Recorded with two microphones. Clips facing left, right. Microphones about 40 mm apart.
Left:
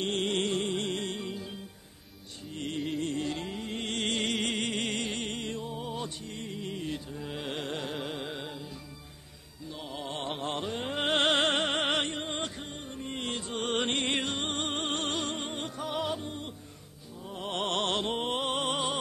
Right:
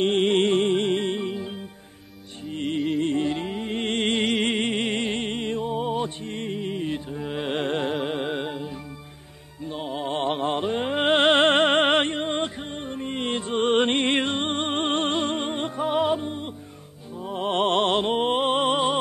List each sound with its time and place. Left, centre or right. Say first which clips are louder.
0.0 s music: right 10 dB; right
12.2 s music: right 8 dB; right
12.7 s music: right 8 dB; right